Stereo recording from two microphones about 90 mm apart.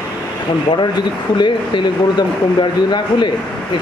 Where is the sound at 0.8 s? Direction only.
55° left (ahead or behind).